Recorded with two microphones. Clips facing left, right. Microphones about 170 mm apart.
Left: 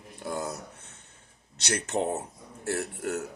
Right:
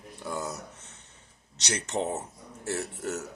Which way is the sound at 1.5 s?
55° left (ahead or behind).